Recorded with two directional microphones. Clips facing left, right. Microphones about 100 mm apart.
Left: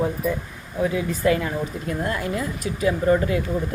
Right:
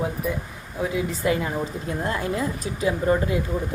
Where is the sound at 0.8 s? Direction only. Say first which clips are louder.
Left 3 dB; 20° right (ahead or behind).